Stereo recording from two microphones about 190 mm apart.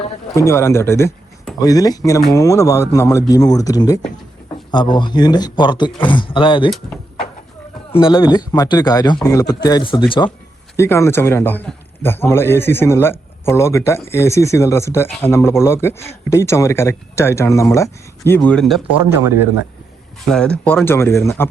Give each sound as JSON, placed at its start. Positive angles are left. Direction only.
{"t": 0.3, "sound": "a man's voice", "side_deg": 15}
{"t": 7.9, "sound": "speech", "side_deg": 25}
{"t": 10.8, "sound": "a man's voice", "side_deg": 15}
{"t": 20.3, "sound": "a man's voice", "side_deg": 5}